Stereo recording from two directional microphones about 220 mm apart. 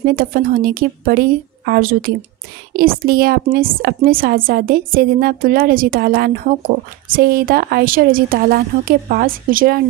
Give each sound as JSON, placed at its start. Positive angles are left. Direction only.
{"t": 0.0, "sound": "a woman's voice", "side_deg": -40}